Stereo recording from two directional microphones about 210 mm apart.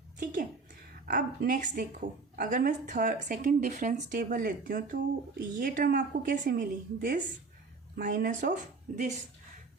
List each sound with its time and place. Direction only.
0.2 s speech: 40° right (ahead or behind)